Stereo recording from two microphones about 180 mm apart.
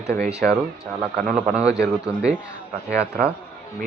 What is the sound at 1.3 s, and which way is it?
Speech, centre (ahead or behind).